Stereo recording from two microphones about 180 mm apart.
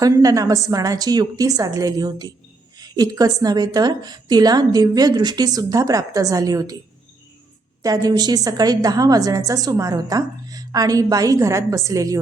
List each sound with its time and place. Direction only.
0.0 s a woman's voice: 20° right (ahead or behind)
7.8 s a woman's voice: 20° right (ahead or behind)